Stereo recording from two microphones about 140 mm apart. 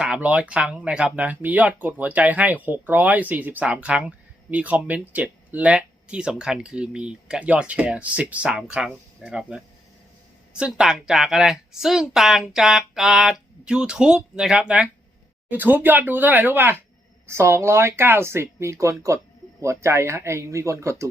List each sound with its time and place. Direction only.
0.0 s speech: 10° right (ahead or behind)
10.8 s speech: 5° right (ahead or behind); by 21.1 s 20° right (ahead or behind)